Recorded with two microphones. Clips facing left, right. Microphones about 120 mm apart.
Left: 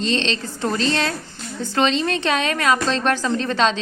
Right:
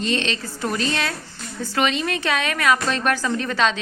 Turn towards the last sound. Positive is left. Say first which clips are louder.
# left 2 dB
turn(degrees=30)  # may be behind; listen again after turning